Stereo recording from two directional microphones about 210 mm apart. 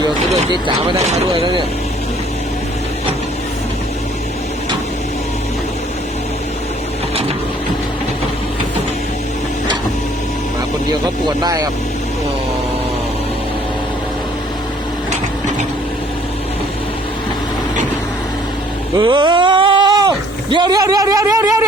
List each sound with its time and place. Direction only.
1.0 s speech: 30° right (ahead or behind)
18.9 s speech: 20° right (ahead or behind)